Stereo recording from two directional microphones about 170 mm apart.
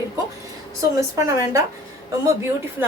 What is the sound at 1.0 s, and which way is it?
Speech, 15° right (ahead or behind).